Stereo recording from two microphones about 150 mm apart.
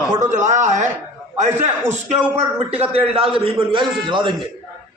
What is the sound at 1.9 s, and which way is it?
A man's voice, 45° right (ahead or behind).